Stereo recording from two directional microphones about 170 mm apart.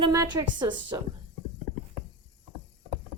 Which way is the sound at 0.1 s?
20° right (ahead or behind).